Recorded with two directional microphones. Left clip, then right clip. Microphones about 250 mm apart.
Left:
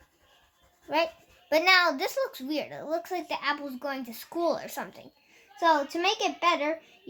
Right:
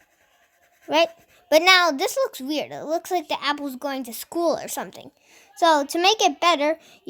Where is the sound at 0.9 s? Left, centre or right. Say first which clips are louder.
Right 7 dB; right.